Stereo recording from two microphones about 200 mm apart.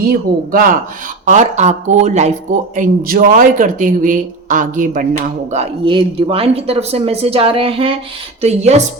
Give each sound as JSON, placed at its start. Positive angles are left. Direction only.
{"t": 0.1, "sound": "speech", "side_deg": -45}
{"t": 5.5, "sound": "speech", "side_deg": -30}